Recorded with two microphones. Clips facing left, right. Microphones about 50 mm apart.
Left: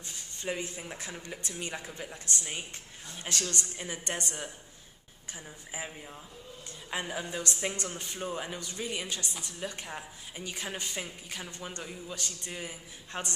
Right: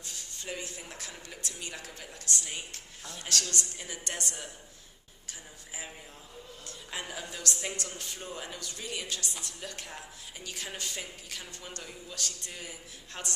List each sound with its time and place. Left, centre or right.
0.0 s speech: left
6.7 s a man's voice: left